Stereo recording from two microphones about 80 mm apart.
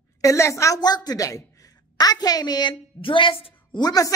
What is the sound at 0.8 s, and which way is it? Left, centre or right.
A woman's voice, left.